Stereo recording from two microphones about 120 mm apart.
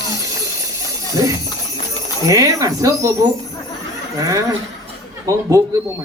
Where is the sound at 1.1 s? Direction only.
30° right (ahead or behind).